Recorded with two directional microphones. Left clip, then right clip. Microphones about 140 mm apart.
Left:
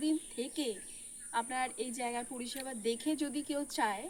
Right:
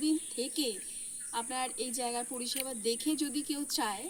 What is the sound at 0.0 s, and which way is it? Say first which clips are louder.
Cricket: right 2 dB; 15° left (ahead or behind).